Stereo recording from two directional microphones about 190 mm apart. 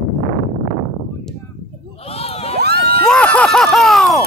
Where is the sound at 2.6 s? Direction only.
60° right (ahead or behind).